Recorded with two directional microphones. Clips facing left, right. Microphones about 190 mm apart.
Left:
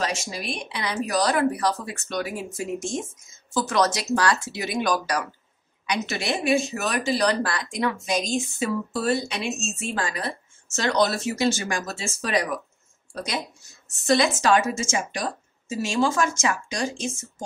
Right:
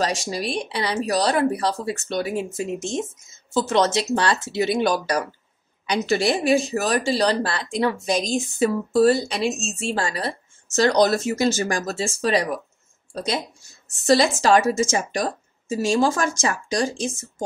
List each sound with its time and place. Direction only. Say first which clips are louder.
0.0 s speech: right 4 dB; 35° right (ahead or behind)